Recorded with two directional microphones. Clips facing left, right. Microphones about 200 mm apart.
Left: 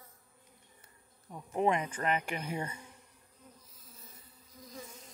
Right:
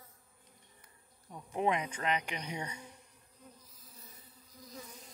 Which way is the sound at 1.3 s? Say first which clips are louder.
Left 2 dB; centre (ahead or behind).